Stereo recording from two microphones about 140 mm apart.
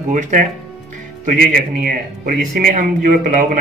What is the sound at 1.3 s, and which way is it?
A man's voice, 90° right.